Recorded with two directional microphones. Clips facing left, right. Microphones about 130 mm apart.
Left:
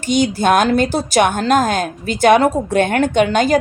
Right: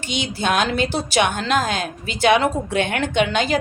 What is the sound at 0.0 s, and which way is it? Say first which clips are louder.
A woman's voice: left 9 dB; 45° left (ahead or behind).